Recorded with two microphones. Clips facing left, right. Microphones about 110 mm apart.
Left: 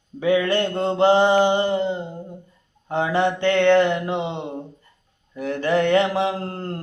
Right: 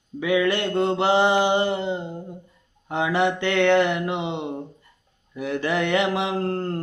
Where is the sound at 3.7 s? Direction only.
15° right (ahead or behind).